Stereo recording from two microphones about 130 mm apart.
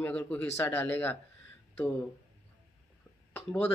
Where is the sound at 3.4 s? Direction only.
15° left (ahead or behind).